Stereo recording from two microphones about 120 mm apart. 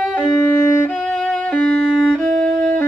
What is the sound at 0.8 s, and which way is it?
Violin, 10° left (ahead or behind).